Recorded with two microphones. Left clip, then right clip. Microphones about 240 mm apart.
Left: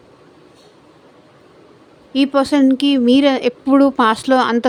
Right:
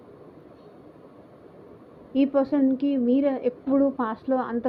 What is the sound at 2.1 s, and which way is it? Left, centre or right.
Speech, left.